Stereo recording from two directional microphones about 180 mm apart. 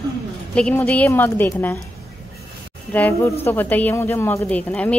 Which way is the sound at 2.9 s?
10° left (ahead or behind).